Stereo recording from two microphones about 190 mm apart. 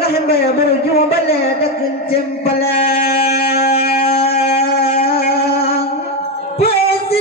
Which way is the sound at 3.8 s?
30° left (ahead or behind).